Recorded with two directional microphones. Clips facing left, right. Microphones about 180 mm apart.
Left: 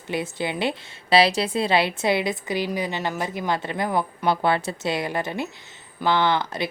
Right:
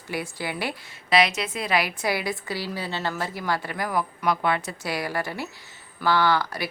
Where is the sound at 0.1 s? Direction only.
20° left (ahead or behind).